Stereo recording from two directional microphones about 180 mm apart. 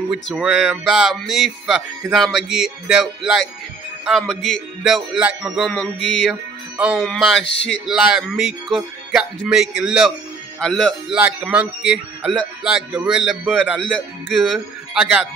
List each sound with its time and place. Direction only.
0.1 s speech: 5° right (ahead or behind)
11.1 s speech: 10° right (ahead or behind)